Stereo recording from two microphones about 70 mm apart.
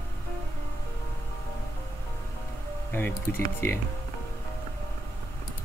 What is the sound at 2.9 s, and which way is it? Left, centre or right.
Speech, left.